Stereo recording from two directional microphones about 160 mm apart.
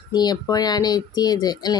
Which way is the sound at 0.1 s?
25° left (ahead or behind).